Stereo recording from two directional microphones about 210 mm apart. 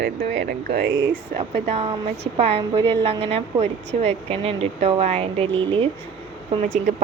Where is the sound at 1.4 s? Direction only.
30° right (ahead or behind).